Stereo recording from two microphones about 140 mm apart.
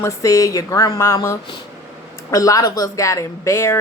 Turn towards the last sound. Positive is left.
turn(degrees=20)  # may be behind; listen again after turning